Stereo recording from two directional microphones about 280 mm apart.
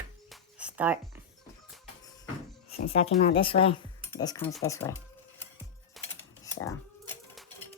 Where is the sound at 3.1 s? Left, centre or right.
Left.